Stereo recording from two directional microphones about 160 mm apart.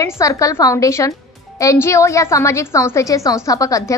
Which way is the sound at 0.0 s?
20° left (ahead or behind).